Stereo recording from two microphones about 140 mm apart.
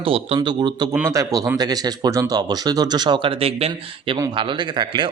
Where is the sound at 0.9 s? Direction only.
20° right (ahead or behind); by 5.1 s 35° right (ahead or behind).